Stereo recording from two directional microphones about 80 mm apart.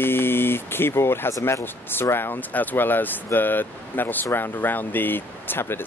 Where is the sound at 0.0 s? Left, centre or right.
Left.